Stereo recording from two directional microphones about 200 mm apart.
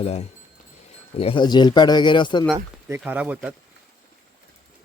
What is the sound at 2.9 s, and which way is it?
Speech, 10° right (ahead or behind).